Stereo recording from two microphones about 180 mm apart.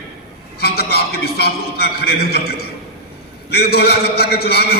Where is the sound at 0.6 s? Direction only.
60° left (ahead or behind).